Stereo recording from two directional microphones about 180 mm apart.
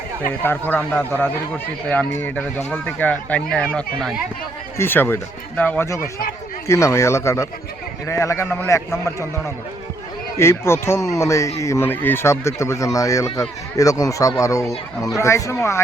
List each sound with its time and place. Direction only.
0.7 s speech: 10° left (ahead or behind)
10.3 s speech: 15° left (ahead or behind)